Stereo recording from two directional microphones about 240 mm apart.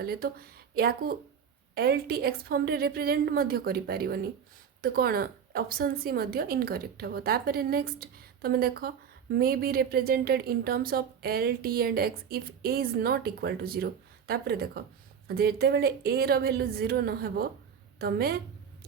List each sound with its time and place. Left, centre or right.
0.0 s a woman's voice: right